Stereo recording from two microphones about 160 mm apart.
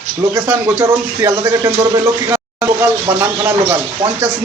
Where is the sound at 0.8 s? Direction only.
15° right (ahead or behind).